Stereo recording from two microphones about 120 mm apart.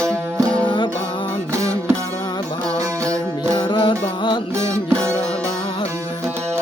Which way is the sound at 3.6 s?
45° left (ahead or behind).